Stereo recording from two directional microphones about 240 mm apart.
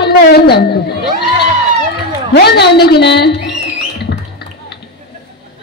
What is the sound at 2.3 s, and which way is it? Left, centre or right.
Speech, left.